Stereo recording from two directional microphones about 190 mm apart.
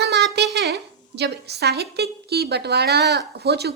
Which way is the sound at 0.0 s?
60° right (ahead or behind).